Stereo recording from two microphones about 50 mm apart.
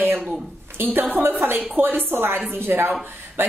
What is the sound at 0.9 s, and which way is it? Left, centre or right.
A woman's voice, right.